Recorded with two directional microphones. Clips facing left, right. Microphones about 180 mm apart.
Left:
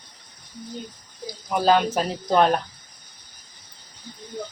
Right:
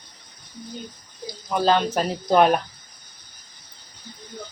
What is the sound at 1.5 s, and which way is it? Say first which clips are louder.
Speech: left 1 dB; 10° left (ahead or behind).